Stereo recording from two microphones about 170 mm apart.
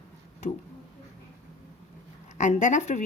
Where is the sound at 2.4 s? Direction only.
45° left (ahead or behind).